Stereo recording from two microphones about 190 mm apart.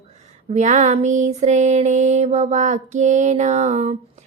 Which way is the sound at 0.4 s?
35° right (ahead or behind).